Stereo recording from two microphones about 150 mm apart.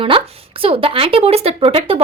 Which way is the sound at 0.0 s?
35° right (ahead or behind).